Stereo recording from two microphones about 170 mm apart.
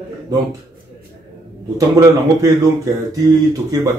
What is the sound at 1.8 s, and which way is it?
Speech, 20° right (ahead or behind).